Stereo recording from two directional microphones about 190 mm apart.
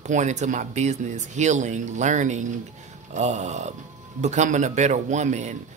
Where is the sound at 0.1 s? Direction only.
40° right (ahead or behind).